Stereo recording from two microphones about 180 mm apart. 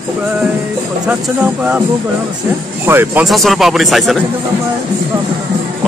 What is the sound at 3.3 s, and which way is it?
Speech, centre (ahead or behind).